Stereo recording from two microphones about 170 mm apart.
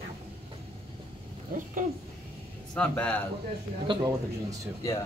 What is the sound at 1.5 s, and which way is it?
Speech, 50° right (ahead or behind).